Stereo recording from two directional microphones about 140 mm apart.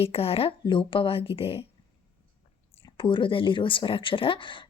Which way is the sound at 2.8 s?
35° left (ahead or behind).